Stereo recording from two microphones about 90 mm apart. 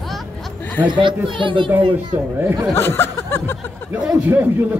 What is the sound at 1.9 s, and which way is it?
Speech, 25° right (ahead or behind).